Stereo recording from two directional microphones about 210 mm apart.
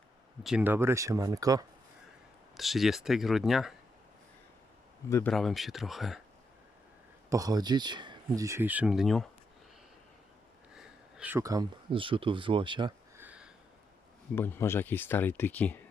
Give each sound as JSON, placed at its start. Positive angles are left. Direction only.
{"t": 0.4, "sound": "speech", "side_deg": -5}
{"t": 2.6, "sound": "speech", "side_deg": 0}
{"t": 5.0, "sound": "speech", "side_deg": 15}
{"t": 5.3, "sound": "speech", "side_deg": 0}
{"t": 7.3, "sound": "speech", "side_deg": -15}
{"t": 10.8, "sound": "speech", "side_deg": -5}
{"t": 13.1, "sound": "a sound", "side_deg": -5}
{"t": 14.3, "sound": "speech", "side_deg": 10}